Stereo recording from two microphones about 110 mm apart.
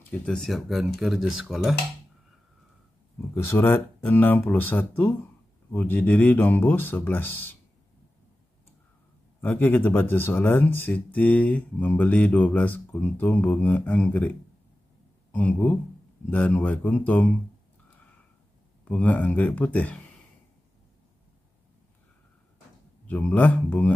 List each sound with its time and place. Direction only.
0.1 s speech: 10° left (ahead or behind)
3.3 s speech: 25° left (ahead or behind)
9.4 s speech: 15° left (ahead or behind)
15.3 s speech: 15° left (ahead or behind)
18.9 s speech: 15° left (ahead or behind)
23.0 s speech: 15° left (ahead or behind)